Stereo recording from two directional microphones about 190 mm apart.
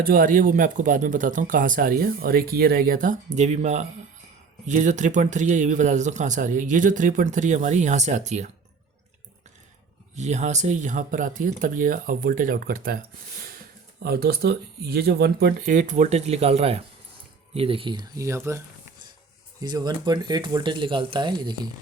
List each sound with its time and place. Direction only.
0.0 s speech: 50° right (ahead or behind)
10.2 s speech: 35° right (ahead or behind)
14.0 s speech: 55° right (ahead or behind); by 21.7 s 20° right (ahead or behind)